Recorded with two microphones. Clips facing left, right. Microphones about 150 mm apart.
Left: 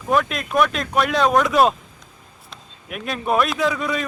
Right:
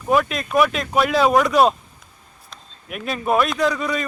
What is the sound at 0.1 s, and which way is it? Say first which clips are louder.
Speech: right 1 dB; centre (ahead or behind).